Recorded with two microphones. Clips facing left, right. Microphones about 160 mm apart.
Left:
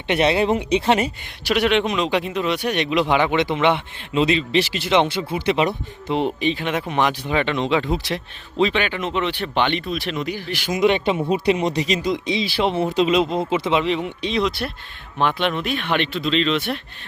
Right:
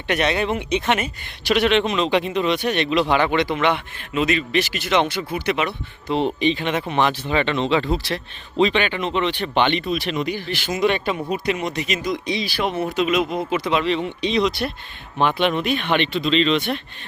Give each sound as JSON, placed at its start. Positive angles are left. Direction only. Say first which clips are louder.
{"t": 0.1, "sound": "speech", "louder": "left 3 dB", "side_deg": 30}
{"t": 1.5, "sound": "speech", "louder": "right 1 dB", "side_deg": 10}
{"t": 6.1, "sound": "speech", "louder": "right 1 dB", "side_deg": 5}
{"t": 8.5, "sound": "speech", "louder": "right 1 dB", "side_deg": 5}